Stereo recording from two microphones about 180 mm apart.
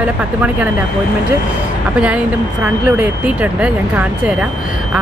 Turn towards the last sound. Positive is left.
turn(degrees=-5)  # may be behind; listen again after turning